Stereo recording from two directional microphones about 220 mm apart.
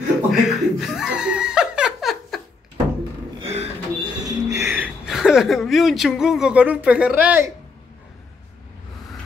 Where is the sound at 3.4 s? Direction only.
30° right (ahead or behind).